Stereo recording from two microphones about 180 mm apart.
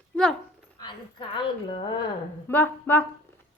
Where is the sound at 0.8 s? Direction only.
25° left (ahead or behind).